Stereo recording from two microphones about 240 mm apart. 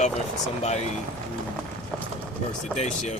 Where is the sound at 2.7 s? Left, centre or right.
Left.